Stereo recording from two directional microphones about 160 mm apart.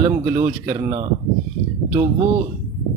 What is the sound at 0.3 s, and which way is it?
Speech, 20° right (ahead or behind).